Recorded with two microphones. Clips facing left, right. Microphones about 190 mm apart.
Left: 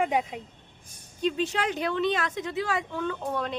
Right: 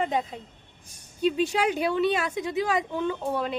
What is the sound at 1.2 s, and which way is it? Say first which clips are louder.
A woman's voice: right 3 dB; 10° right (ahead or behind).